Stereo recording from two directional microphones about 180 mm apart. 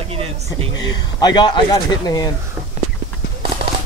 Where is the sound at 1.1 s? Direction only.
25° left (ahead or behind).